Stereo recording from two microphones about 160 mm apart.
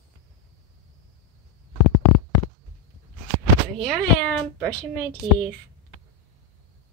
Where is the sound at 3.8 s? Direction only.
5° left (ahead or behind).